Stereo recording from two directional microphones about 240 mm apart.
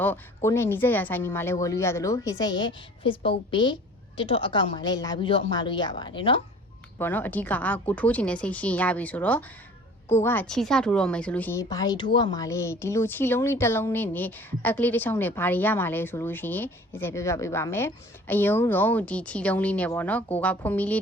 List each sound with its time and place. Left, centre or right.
0.0 s a woman's voice: centre
7.0 s a woman's voice: centre